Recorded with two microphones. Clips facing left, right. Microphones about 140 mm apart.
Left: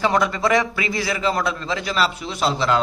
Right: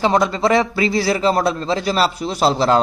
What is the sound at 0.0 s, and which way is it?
Speech, 25° right (ahead or behind).